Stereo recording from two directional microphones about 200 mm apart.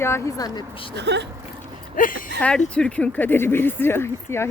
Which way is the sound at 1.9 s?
45° left (ahead or behind).